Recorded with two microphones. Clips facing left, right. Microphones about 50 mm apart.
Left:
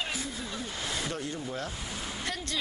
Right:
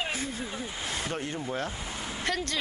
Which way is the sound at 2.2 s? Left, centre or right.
Right.